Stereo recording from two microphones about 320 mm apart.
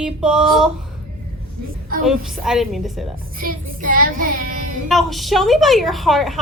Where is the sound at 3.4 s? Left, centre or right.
Right.